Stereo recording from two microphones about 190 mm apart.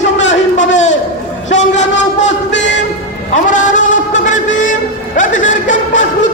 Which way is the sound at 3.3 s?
40° left (ahead or behind).